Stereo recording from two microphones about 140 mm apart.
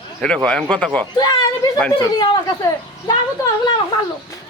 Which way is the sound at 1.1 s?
25° left (ahead or behind).